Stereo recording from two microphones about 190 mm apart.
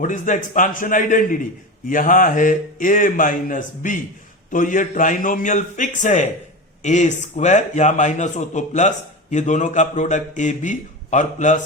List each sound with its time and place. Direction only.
0.0 s a man's voice: 40° left (ahead or behind)